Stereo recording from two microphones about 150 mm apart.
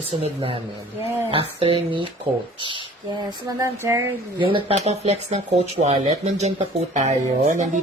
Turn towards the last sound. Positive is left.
turn(degrees=-50)  # may be behind; listen again after turning